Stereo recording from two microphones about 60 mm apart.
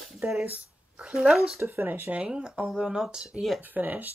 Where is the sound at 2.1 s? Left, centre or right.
Centre.